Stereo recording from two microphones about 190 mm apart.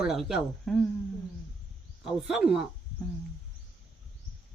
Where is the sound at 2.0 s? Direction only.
5° right (ahead or behind).